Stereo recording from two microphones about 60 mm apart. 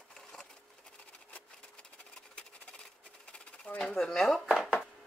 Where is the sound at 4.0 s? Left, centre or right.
Centre.